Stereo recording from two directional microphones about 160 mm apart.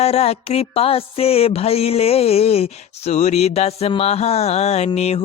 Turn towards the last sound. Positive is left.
turn(degrees=40)  # may be behind; listen again after turning